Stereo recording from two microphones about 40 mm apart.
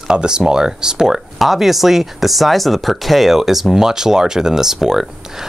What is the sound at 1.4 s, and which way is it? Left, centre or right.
Speech, centre.